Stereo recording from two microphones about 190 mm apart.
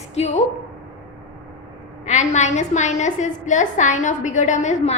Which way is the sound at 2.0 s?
40° left (ahead or behind).